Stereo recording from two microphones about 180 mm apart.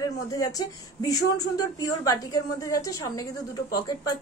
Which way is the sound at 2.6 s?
20° left (ahead or behind).